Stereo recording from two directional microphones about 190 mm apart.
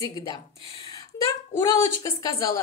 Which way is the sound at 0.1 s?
20° left (ahead or behind).